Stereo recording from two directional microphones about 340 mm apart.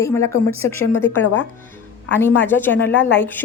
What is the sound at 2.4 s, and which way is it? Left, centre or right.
A woman's voice, centre.